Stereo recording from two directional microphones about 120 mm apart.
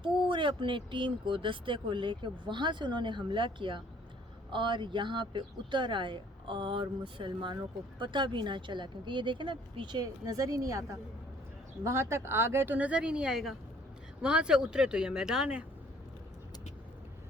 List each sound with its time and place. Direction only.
0.0 s speech: 45° right (ahead or behind); by 15.6 s 5° right (ahead or behind)